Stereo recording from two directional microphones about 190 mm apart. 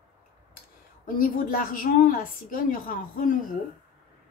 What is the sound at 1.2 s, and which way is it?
A woman's voice, 45° left (ahead or behind).